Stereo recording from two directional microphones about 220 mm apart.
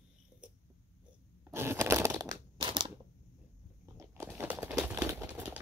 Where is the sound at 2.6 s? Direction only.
20° right (ahead or behind).